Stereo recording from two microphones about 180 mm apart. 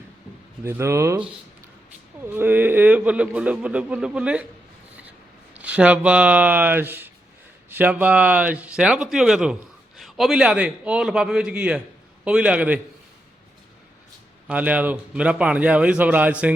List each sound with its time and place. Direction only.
0.6 s speech: 15° right (ahead or behind)
2.2 s speech: 10° right (ahead or behind)
5.5 s a man's voice: 5° right (ahead or behind)
14.4 s speech: 10° right (ahead or behind)